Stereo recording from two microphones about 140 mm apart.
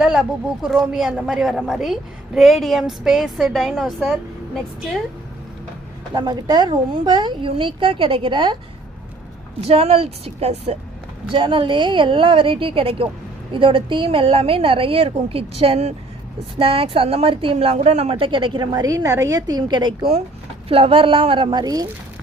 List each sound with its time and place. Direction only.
0.0 s a woman's voice: 5° right (ahead or behind)
6.1 s a woman's voice: 30° right (ahead or behind)
9.6 s a woman's voice: 45° right (ahead or behind)
11.3 s a woman's voice: 35° right (ahead or behind)
20.7 s a woman's voice: 40° right (ahead or behind)